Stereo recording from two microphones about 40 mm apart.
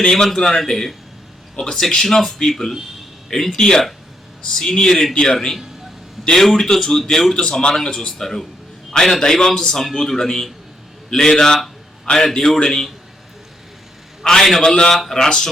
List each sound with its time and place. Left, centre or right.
0.0 s a man's voice: centre
7.6 s a man's voice: centre
14.3 s a man's voice: centre